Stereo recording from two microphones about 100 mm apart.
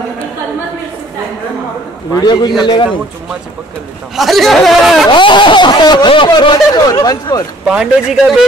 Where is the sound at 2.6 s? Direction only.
50° left (ahead or behind).